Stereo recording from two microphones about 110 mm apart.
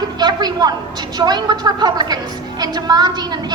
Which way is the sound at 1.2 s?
40° right (ahead or behind).